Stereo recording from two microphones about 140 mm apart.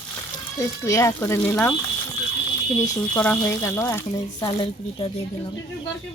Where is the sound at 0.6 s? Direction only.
20° left (ahead or behind).